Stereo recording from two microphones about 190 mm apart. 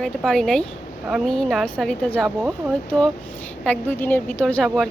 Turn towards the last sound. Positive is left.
turn(degrees=5)  # may be behind; listen again after turning